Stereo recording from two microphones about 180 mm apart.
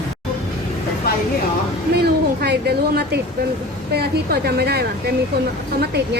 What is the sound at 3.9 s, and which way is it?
Speech, 65° right (ahead or behind).